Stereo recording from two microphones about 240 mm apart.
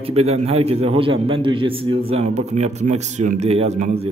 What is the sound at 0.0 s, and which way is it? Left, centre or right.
A man's voice, right.